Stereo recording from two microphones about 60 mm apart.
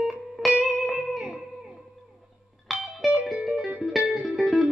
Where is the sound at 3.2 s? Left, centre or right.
Centre.